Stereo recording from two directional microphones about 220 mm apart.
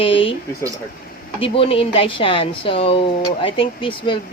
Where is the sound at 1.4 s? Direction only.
25° left (ahead or behind).